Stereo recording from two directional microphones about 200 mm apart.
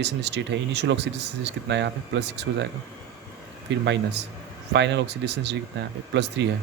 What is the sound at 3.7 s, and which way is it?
Speech, 65° right (ahead or behind).